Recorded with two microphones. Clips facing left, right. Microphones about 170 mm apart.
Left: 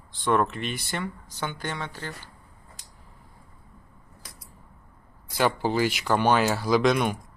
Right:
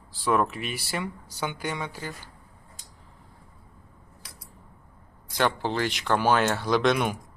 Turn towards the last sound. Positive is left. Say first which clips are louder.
# left 1 dB
turn(degrees=0)  # may be behind; listen again after turning